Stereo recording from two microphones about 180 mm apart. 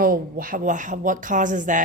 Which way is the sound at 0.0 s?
50° right (ahead or behind).